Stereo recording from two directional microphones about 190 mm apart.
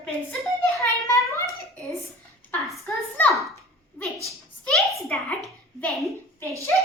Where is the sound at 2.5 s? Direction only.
5° left (ahead or behind).